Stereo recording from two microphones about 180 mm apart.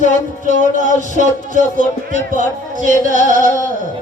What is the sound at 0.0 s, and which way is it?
Music, 45° left (ahead or behind).